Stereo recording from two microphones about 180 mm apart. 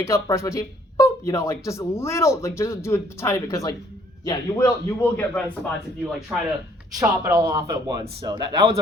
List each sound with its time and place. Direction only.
0.0 s speech: 15° left (ahead or behind)
6.3 s speech: 5° right (ahead or behind)
6.9 s speech: 20° right (ahead or behind)